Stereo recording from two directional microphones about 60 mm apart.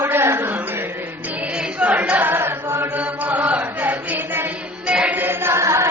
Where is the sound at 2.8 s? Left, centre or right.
Right.